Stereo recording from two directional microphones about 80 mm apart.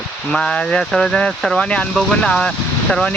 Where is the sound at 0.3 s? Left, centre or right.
Centre.